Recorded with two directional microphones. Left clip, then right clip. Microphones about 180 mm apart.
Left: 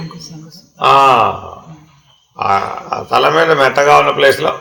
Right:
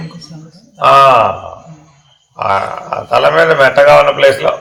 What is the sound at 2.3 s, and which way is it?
Speech, 60° left (ahead or behind).